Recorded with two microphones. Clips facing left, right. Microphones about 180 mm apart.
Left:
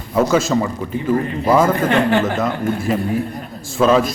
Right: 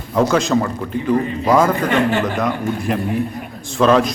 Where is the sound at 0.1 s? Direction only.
5° left (ahead or behind).